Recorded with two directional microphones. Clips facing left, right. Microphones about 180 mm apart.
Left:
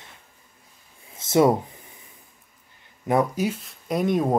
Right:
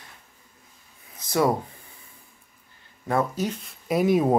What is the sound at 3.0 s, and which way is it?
Speech, 15° left (ahead or behind).